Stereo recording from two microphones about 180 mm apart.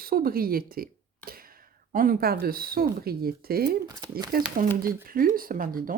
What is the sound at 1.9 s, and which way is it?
Speech, 50° right (ahead or behind).